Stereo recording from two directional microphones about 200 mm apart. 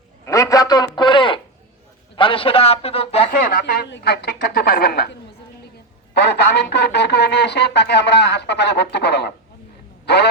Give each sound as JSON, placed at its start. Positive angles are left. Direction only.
{"t": 0.3, "sound": "radio", "side_deg": 15}
{"t": 2.1, "sound": "a man's voice", "side_deg": 25}
{"t": 3.4, "sound": "a woman's voice", "side_deg": 45}
{"t": 6.1, "sound": "speech", "side_deg": 55}